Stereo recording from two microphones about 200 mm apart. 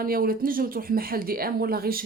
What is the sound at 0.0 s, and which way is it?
Speech, 45° right (ahead or behind).